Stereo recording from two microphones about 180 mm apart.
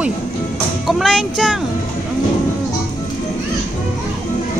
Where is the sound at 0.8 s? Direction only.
Centre (ahead or behind).